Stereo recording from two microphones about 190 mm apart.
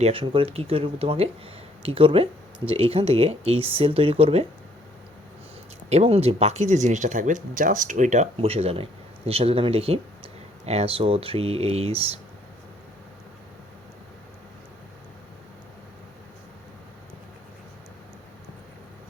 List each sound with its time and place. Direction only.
0.0 s speech: 30° right (ahead or behind)
5.9 s speech: 30° right (ahead or behind)